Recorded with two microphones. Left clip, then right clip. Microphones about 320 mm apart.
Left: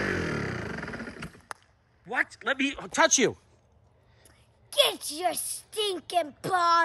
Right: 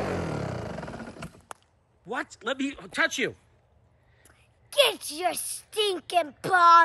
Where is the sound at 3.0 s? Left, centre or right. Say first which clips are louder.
Left 4 dB; centre.